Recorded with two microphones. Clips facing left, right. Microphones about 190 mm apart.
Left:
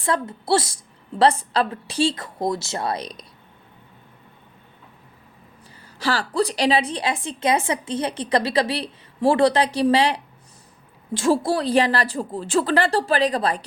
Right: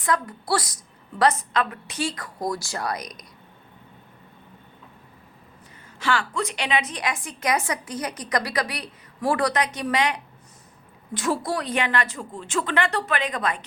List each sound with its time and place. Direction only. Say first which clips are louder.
0.0 s a woman's voice: left 2 dB; 25° left (ahead or behind)
6.0 s a woman's voice: left 4 dB; 35° left (ahead or behind)